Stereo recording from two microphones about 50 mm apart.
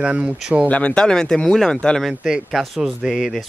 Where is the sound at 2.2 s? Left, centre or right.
Centre.